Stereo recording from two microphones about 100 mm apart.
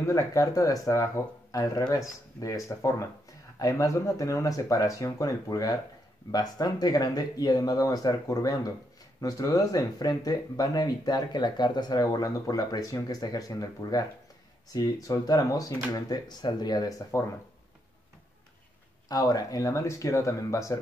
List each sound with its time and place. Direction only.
0.0 s speech: 35° left (ahead or behind)
17.1 s speech: 30° left (ahead or behind)
19.0 s speech: 35° left (ahead or behind)